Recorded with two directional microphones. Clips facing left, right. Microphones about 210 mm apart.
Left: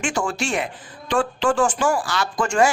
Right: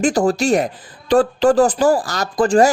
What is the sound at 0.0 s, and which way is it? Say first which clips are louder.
Speech: right 9 dB; 35° right (ahead or behind).